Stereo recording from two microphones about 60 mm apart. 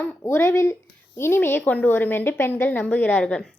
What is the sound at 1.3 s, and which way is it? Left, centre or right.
A woman's voice, left.